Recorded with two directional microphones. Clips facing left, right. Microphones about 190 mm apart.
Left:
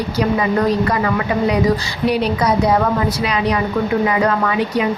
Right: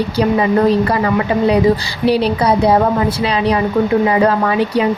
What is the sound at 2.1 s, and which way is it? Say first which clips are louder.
A woman's voice: right 3 dB; 30° right (ahead or behind).